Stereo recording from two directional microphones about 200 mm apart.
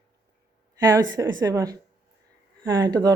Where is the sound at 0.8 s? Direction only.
20° right (ahead or behind).